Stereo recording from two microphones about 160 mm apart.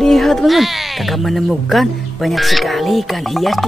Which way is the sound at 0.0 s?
Centre (ahead or behind).